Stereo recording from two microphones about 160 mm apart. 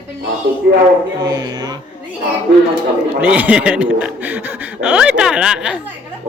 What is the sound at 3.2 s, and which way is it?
Speech, 10° right (ahead or behind).